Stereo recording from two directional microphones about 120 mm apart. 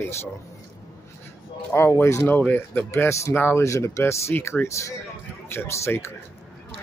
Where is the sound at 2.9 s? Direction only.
25° left (ahead or behind).